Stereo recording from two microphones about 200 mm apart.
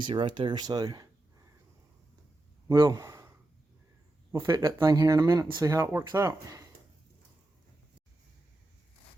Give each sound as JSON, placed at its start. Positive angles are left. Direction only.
{"t": 0.0, "sound": "speech", "side_deg": -25}
{"t": 2.6, "sound": "speech", "side_deg": -20}